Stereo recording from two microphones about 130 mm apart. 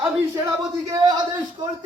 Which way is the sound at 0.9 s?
30° right (ahead or behind).